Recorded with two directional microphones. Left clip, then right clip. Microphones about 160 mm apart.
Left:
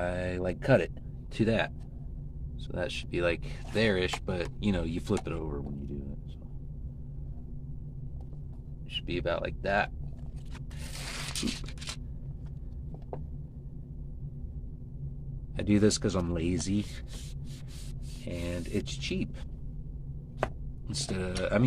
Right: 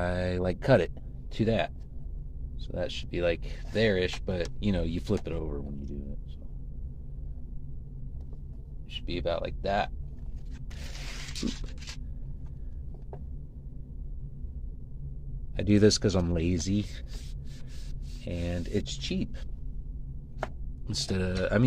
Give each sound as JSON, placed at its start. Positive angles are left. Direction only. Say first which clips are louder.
{"t": 0.0, "sound": "a sound", "louder": "right 2 dB", "side_deg": -35}
{"t": 1.3, "sound": "speech", "louder": "even", "side_deg": -15}
{"t": 2.7, "sound": "speech", "louder": "even", "side_deg": -10}
{"t": 8.9, "sound": "speech", "louder": "even", "side_deg": -10}
{"t": 15.5, "sound": "speech", "louder": "right 3 dB", "side_deg": -30}
{"t": 18.2, "sound": "speech", "louder": "right 1 dB", "side_deg": -35}
{"t": 20.8, "sound": "speech", "louder": "right 3 dB", "side_deg": -45}